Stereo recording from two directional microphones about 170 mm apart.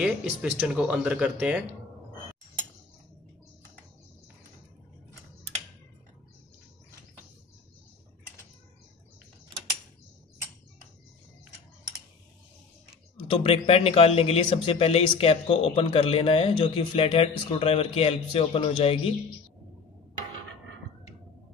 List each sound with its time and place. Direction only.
0.0 s speech: 5° right (ahead or behind)
13.3 s a man's voice: 35° left (ahead or behind)